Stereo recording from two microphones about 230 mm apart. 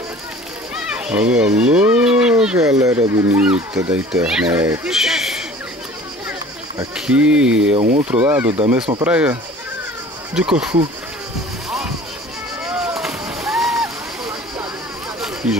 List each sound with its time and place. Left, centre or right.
0.9 s speech: centre
7.1 s speech: centre
7.7 s speech: right
8.0 s speech: centre
12.6 s boat: centre
15.1 s a sound: centre